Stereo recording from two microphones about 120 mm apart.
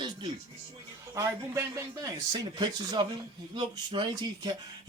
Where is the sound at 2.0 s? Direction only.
35° right (ahead or behind).